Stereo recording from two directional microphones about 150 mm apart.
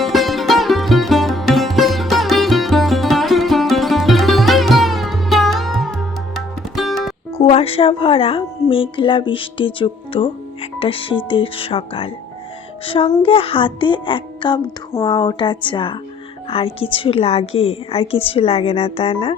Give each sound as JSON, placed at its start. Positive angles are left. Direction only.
{"t": 0.0, "sound": "music", "side_deg": 0}
{"t": 7.4, "sound": "speech", "side_deg": 40}